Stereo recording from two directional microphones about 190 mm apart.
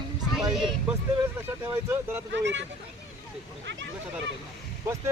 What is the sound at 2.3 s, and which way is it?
Speech, 70° right (ahead or behind).